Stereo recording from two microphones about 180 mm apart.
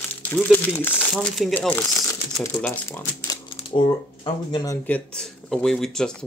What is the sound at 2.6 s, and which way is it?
Speech, 10° left (ahead or behind).